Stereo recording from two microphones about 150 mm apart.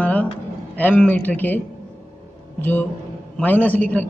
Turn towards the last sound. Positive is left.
turn(degrees=10)  # may be behind; listen again after turning